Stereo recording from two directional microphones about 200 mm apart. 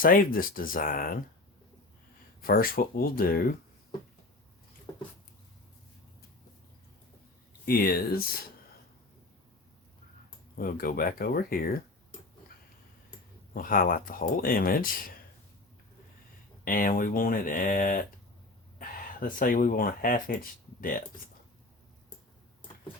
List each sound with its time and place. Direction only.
0.0 s speech: 45° left (ahead or behind)
2.4 s speech: 45° left (ahead or behind)
4.9 s a sound: 15° left (ahead or behind)
7.6 s speech: 50° left (ahead or behind)
10.6 s speech: 45° left (ahead or behind)
13.5 s speech: 45° left (ahead or behind)
16.6 s speech: 45° left (ahead or behind)